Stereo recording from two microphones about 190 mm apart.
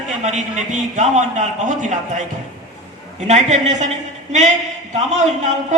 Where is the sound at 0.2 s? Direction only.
40° right (ahead or behind).